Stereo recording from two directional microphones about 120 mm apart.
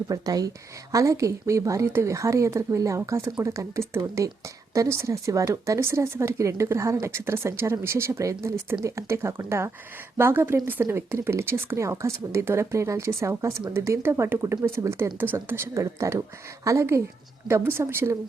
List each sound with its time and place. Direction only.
0.1 s a woman's voice: 30° right (ahead or behind)